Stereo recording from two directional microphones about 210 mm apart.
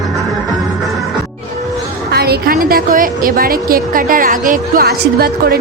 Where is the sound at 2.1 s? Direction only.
50° right (ahead or behind).